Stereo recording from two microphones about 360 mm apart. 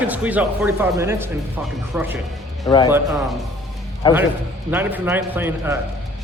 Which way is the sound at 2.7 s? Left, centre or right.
Centre.